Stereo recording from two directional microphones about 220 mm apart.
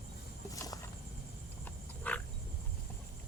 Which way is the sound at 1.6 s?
5° left (ahead or behind).